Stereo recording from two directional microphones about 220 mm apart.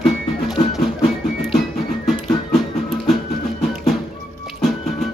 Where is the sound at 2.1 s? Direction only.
Centre (ahead or behind).